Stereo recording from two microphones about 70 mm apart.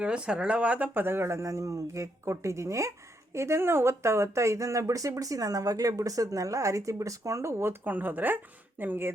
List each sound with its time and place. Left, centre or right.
0.0 s speech: centre; by 9.1 s right